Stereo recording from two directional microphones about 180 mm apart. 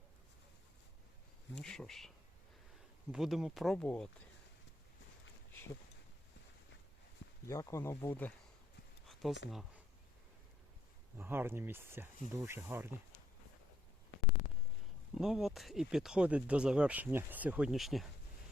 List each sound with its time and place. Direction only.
1.6 s speech: 5° left (ahead or behind)
7.4 s speech: 15° left (ahead or behind)
9.5 s speech: centre (ahead or behind)
11.2 s speech: 10° right (ahead or behind)
15.1 s speech: centre (ahead or behind)